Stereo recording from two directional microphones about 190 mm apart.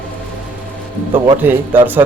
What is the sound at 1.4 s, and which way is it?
Speech, 10° right (ahead or behind).